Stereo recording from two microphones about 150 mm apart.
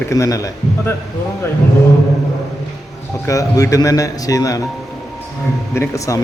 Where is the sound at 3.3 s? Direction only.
20° left (ahead or behind).